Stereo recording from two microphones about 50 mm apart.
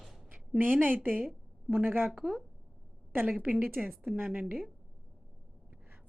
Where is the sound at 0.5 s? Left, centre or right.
Right.